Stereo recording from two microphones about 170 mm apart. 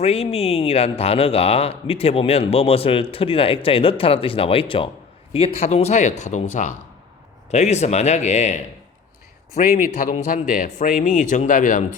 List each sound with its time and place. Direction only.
0.0 s speech: 35° left (ahead or behind)
9.7 s a man's voice: 55° left (ahead or behind)